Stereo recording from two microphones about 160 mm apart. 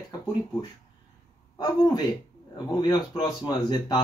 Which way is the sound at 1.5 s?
25° left (ahead or behind).